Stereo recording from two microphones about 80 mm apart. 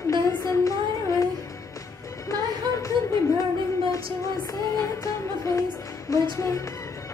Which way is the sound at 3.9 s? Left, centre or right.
Left.